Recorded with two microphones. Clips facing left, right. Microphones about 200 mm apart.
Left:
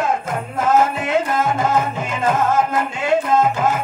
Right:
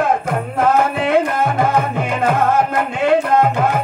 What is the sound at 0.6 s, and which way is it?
Music, 60° right (ahead or behind).